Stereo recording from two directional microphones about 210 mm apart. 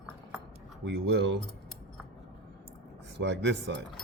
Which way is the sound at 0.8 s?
55° right (ahead or behind).